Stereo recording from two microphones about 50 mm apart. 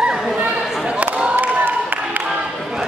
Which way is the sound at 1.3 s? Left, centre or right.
Right.